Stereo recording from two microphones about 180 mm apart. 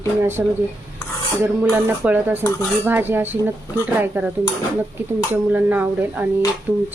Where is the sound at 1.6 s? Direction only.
10° right (ahead or behind).